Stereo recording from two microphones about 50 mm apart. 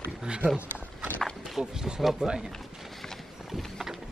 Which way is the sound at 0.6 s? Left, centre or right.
Right.